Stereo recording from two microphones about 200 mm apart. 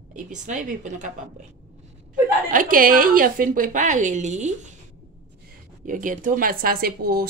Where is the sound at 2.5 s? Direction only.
40° right (ahead or behind).